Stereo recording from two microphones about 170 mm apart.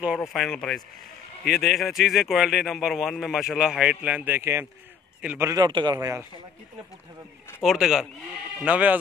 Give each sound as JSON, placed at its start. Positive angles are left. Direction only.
{"t": 0.3, "sound": "a man's voice", "side_deg": 0}
{"t": 5.5, "sound": "a man's voice", "side_deg": -25}
{"t": 7.6, "sound": "a man's voice", "side_deg": 0}